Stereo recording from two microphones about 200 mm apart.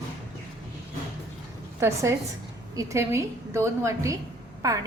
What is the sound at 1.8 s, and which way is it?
A woman's voice, 15° right (ahead or behind).